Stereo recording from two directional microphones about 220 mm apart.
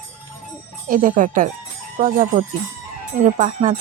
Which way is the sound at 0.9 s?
40° right (ahead or behind).